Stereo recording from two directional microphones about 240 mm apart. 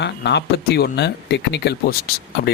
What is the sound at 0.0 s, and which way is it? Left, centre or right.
Speech, left.